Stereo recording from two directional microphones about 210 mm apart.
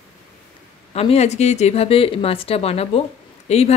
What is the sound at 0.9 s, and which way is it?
Speech, 30° left (ahead or behind).